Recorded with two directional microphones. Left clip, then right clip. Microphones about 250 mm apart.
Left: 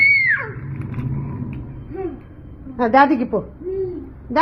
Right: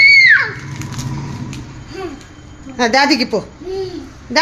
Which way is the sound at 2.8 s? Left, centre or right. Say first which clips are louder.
Right 1 dB; centre.